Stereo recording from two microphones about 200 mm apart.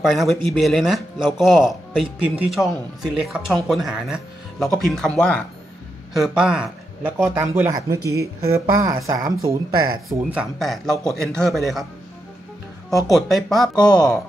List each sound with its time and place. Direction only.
0.0 s speech: centre (ahead or behind)
8.0 s speech: 55° right (ahead or behind)
8.5 s speech: 15° right (ahead or behind)
10.0 s speech: centre (ahead or behind)
13.1 s speech: centre (ahead or behind)